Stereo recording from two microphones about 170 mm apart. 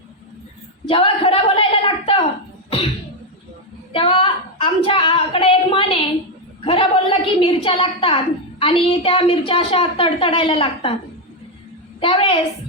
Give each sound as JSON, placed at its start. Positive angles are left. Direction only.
{"t": 0.9, "sound": "a sound", "side_deg": 35}
{"t": 3.9, "sound": "a woman's voice", "side_deg": 30}
{"t": 11.9, "sound": "a woman's voice", "side_deg": 30}